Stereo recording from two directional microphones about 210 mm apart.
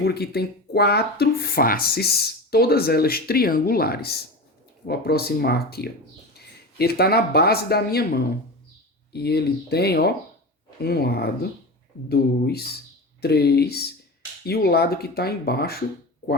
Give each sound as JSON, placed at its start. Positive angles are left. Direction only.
{"t": 0.0, "sound": "speech", "side_deg": 50}